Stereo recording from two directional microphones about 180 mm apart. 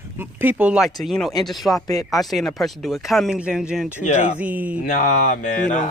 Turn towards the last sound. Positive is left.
turn(degrees=40)  # may be behind; listen again after turning